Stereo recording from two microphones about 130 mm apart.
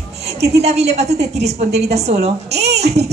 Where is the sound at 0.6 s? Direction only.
55° right (ahead or behind).